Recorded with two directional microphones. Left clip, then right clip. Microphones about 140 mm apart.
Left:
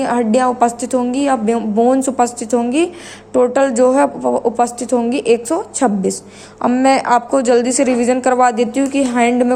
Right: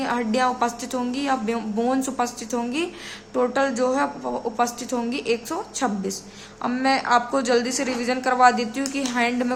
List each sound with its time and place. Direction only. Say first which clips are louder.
0.0 s a woman's voice: left 8 dB; 35° left (ahead or behind)
1.5 s a woman's voice: left 10 dB; 25° left (ahead or behind); by 4.1 s 45° left (ahead or behind)
4.2 s a woman's voice: left 9 dB; 30° left (ahead or behind)
6.8 s a woman's voice: left 6 dB; 50° left (ahead or behind)